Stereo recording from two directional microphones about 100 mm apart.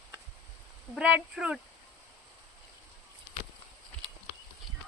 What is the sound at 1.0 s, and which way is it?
Speech, 10° right (ahead or behind).